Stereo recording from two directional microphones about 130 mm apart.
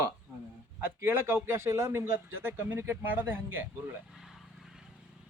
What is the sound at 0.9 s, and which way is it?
Speech, 20° right (ahead or behind).